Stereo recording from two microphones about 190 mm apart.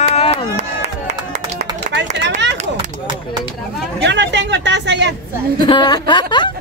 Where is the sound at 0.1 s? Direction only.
30° left (ahead or behind).